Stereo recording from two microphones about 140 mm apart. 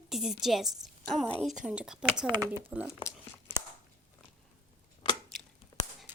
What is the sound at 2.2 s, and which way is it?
Speech, 30° right (ahead or behind).